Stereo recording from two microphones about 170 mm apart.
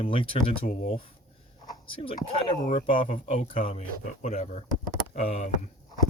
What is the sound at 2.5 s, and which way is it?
Speech, 50° left (ahead or behind).